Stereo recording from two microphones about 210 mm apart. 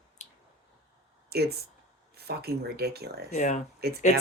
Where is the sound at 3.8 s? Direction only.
50° right (ahead or behind).